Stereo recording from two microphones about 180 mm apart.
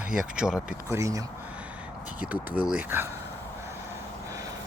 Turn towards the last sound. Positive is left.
turn(degrees=-10)  # may be behind; listen again after turning